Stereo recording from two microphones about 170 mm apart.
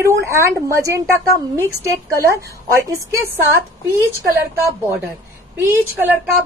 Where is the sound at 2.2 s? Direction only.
15° right (ahead or behind).